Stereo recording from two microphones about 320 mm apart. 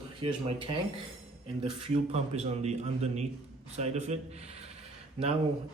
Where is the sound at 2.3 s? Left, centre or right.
Centre.